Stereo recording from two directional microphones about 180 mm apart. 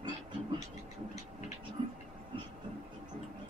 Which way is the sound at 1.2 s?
40° left (ahead or behind).